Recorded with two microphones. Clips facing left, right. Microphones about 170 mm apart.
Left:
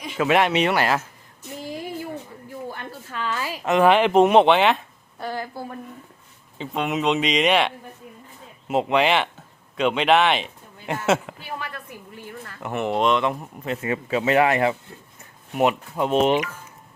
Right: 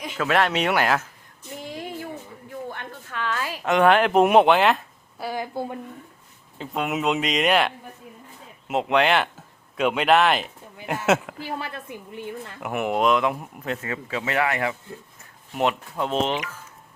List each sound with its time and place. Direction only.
0.2 s speech: 10° left (ahead or behind)
1.6 s a sound: centre (ahead or behind)
2.6 s a woman's voice: 5° left (ahead or behind); by 5.8 s 20° right (ahead or behind)
6.6 s speech: 5° right (ahead or behind)
11.6 s a woman's voice: 25° right (ahead or behind)
12.5 s speech: 10° right (ahead or behind)
13.8 s speech: 20° left (ahead or behind)
15.5 s speech: 10° left (ahead or behind)